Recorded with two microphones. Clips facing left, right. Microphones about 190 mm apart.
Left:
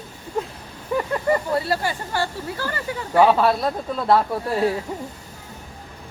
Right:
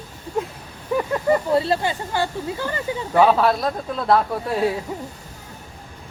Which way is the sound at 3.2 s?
5° left (ahead or behind).